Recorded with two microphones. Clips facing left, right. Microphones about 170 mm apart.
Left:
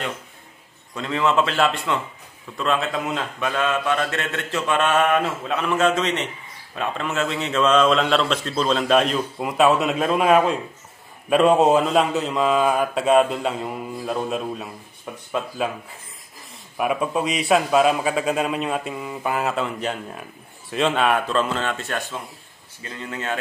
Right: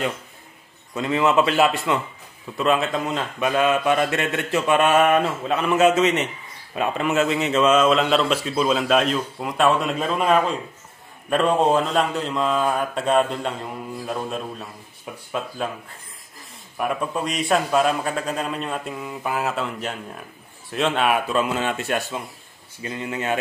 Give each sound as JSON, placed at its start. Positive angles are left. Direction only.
{"t": 0.9, "sound": "a man's voice", "side_deg": -5}
{"t": 16.7, "sound": "a man's voice", "side_deg": 5}